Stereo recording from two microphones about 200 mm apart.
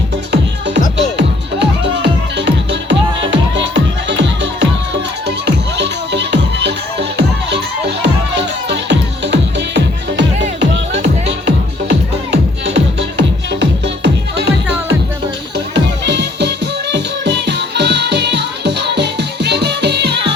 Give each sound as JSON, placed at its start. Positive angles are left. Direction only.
{"t": 0.9, "sound": "music", "side_deg": -60}